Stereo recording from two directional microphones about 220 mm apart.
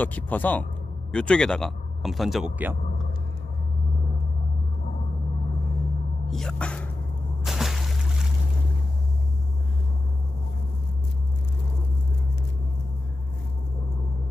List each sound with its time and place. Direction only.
0.0 s speech: 5° left (ahead or behind)
6.2 s speech: centre (ahead or behind)
7.4 s a sound: centre (ahead or behind)